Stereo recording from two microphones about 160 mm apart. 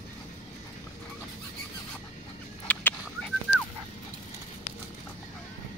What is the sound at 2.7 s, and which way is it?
Bird, 10° left (ahead or behind).